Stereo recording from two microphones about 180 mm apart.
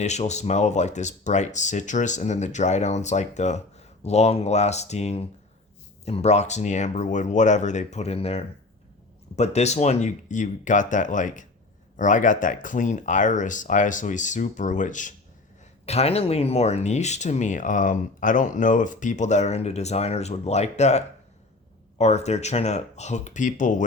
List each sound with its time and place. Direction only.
0.0 s speech: 40° left (ahead or behind)